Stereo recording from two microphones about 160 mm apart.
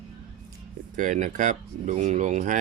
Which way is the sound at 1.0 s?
55° right (ahead or behind).